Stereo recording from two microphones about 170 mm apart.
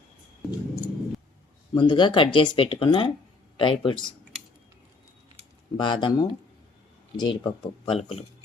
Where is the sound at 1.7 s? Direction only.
30° left (ahead or behind).